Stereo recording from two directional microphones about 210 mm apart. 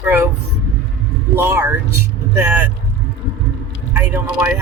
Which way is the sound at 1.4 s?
15° right (ahead or behind).